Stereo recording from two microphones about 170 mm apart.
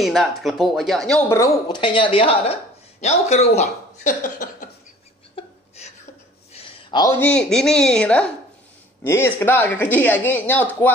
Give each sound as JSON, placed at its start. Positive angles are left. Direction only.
{"t": 0.0, "sound": "speech", "side_deg": 0}
{"t": 1.3, "sound": "speech", "side_deg": 20}
{"t": 1.8, "sound": "speech", "side_deg": 30}
{"t": 5.3, "sound": "a sound", "side_deg": 40}
{"t": 6.5, "sound": "a sound", "side_deg": 25}
{"t": 7.1, "sound": "speech", "side_deg": 10}